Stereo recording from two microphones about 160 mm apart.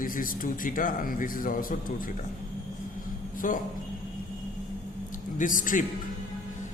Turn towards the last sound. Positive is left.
turn(degrees=55)  # may be behind; listen again after turning